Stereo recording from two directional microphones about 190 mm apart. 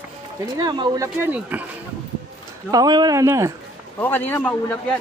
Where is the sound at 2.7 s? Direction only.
20° right (ahead or behind).